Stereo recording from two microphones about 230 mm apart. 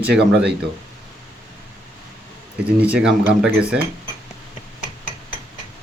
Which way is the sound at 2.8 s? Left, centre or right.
Centre.